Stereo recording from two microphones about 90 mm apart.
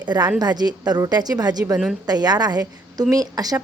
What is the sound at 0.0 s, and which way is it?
A woman's voice, 55° right (ahead or behind).